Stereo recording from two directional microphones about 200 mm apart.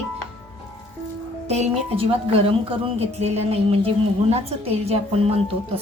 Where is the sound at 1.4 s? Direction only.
35° right (ahead or behind).